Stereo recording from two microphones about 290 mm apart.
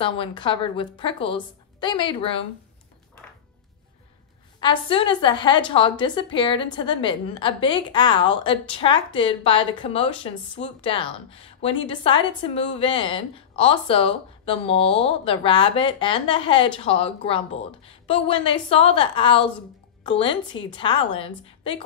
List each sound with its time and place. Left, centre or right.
0.0 s a woman's voice: centre
4.6 s a woman's voice: centre